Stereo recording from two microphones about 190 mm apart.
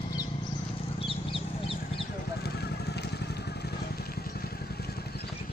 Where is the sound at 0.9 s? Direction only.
30° left (ahead or behind).